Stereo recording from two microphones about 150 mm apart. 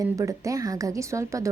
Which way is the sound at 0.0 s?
20° right (ahead or behind).